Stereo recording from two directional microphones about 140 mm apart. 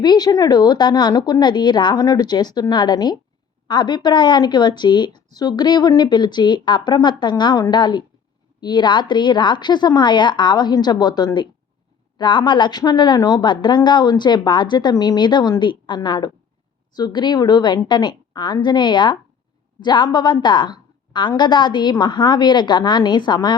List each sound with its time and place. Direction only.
0.0 s a woman's voice: 30° left (ahead or behind)